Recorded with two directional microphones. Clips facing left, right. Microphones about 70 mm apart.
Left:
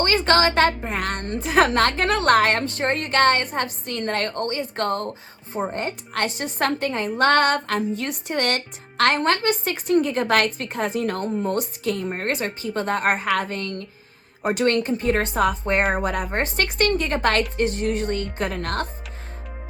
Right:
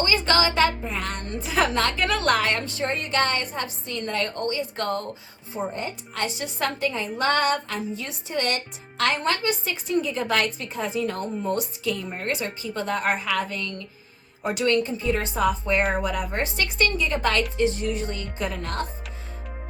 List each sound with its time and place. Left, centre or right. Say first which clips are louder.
0.0 s a woman's voice: left 3 dB; left